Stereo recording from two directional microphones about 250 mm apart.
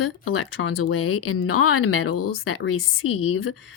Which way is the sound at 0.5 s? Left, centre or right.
Left.